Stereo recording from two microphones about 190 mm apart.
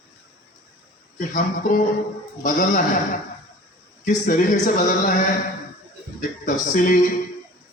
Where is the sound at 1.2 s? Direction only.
45° left (ahead or behind).